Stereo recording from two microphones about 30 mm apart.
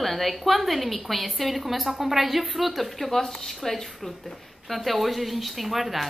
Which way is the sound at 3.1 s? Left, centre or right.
Centre.